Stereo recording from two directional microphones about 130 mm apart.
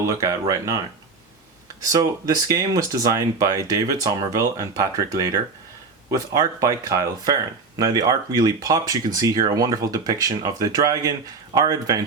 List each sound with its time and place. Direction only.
0.0 s speech: 25° right (ahead or behind)
1.8 s speech: 30° right (ahead or behind)